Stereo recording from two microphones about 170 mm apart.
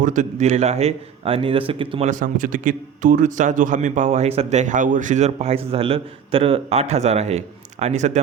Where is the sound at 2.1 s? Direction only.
50° right (ahead or behind).